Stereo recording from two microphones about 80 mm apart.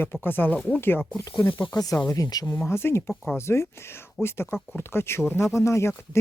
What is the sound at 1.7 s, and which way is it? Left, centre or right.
Speech, left.